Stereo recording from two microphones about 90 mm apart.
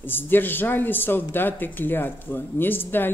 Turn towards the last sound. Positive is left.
turn(degrees=20)  # may be behind; listen again after turning